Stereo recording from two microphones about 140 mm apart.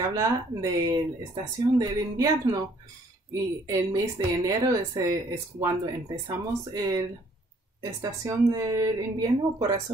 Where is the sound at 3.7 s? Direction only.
25° right (ahead or behind).